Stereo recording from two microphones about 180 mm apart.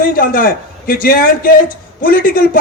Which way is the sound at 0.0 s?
50° left (ahead or behind).